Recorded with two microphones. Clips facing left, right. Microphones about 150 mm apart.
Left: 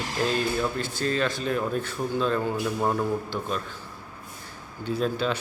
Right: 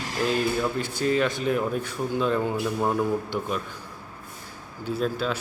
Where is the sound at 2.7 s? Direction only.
5° right (ahead or behind).